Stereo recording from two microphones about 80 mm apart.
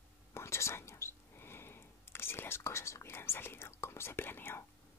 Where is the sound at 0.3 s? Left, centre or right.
Left.